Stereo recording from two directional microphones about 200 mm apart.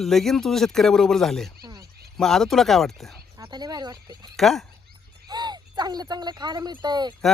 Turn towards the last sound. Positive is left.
turn(degrees=-20)  # may be behind; listen again after turning